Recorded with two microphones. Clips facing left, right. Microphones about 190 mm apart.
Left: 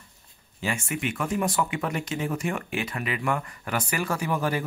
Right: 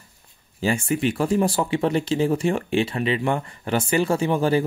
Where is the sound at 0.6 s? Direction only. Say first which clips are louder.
Right 8 dB; 35° right (ahead or behind).